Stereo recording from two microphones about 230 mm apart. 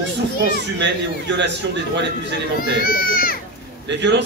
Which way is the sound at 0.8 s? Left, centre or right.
Right.